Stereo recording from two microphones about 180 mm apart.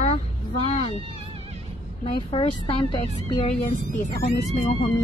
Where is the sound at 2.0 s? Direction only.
30° left (ahead or behind).